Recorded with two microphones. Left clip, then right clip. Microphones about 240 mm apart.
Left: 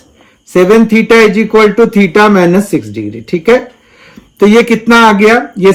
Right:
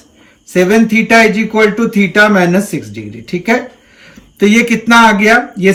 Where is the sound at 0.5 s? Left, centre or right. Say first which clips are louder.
Left 4 dB; centre.